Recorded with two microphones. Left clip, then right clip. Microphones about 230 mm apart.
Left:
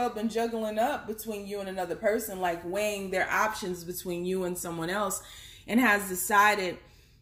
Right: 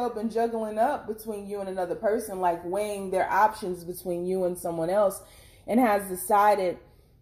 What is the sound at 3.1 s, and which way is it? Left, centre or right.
Speech, left.